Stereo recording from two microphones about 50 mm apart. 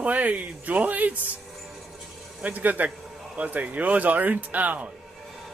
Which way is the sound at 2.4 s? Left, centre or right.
Right.